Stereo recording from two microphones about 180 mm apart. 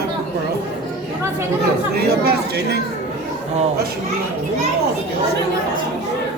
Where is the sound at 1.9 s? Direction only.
60° right (ahead or behind).